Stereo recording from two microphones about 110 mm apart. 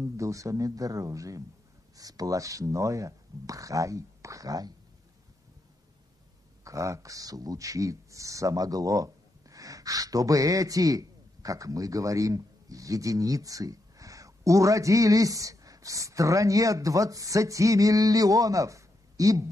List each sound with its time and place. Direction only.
0.0 s speech: 30° right (ahead or behind)
6.6 s speech: 30° right (ahead or behind)